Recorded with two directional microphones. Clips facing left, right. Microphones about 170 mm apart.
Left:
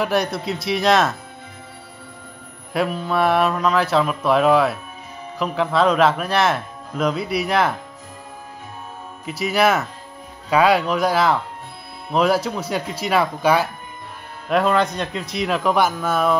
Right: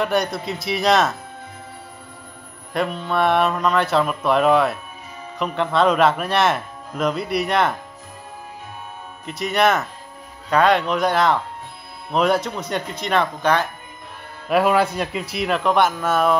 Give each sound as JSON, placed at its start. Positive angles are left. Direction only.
{"t": 0.0, "sound": "speech", "side_deg": 0}
{"t": 2.7, "sound": "speech", "side_deg": 5}
{"t": 9.2, "sound": "speech", "side_deg": 5}
{"t": 14.5, "sound": "speech", "side_deg": -5}